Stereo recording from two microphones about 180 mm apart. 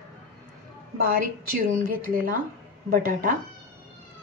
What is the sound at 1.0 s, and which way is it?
A woman's voice, 55° right (ahead or behind).